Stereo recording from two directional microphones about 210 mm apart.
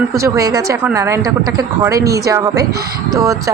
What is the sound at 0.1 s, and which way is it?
Speech, 15° right (ahead or behind).